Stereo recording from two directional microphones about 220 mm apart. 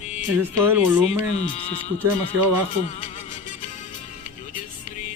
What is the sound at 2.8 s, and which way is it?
Music, 30° left (ahead or behind).